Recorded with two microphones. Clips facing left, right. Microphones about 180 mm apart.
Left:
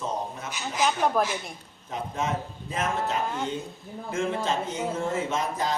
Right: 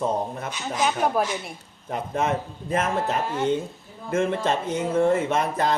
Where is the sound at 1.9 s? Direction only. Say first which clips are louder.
Right 5 dB; 60° right (ahead or behind).